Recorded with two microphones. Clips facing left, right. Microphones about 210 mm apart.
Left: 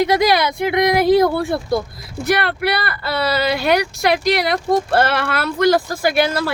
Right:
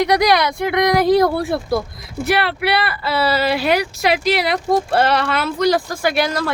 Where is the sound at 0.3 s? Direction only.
25° left (ahead or behind).